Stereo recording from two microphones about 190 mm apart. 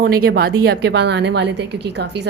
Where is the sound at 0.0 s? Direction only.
55° right (ahead or behind).